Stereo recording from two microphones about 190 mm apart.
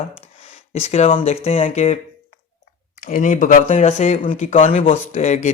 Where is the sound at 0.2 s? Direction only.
35° left (ahead or behind).